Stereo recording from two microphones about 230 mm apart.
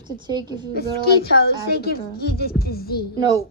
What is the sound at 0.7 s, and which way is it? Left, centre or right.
Speech, left.